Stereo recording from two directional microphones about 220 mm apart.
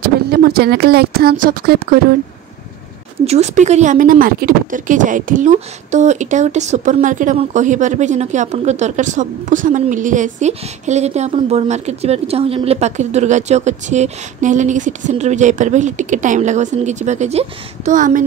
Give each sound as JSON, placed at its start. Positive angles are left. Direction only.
{"t": 0.3, "sound": "speech", "side_deg": -45}
{"t": 3.3, "sound": "speech", "side_deg": -30}